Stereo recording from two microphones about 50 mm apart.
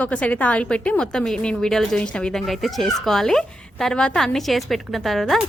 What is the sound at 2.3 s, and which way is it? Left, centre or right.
A woman's voice, centre.